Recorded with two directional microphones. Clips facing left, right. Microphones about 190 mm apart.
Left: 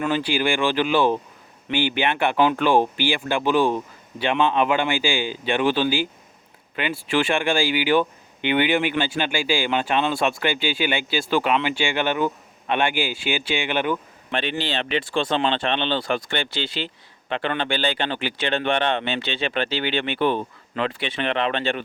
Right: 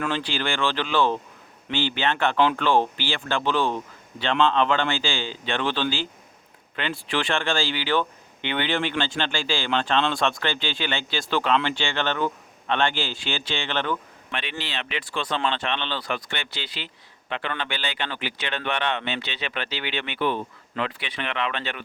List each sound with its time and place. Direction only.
0.0 s speech: 10° left (ahead or behind)
14.3 s speech: 30° left (ahead or behind)